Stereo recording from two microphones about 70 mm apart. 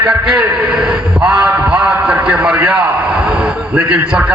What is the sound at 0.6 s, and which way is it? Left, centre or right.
A man's voice, centre.